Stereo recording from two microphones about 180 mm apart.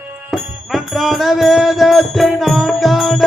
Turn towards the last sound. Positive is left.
turn(degrees=0)  # may be behind; listen again after turning